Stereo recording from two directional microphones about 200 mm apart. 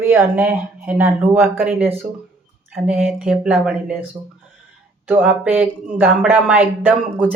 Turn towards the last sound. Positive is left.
turn(degrees=-5)  # may be behind; listen again after turning